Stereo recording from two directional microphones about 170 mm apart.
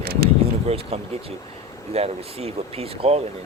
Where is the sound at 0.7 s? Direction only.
35° right (ahead or behind).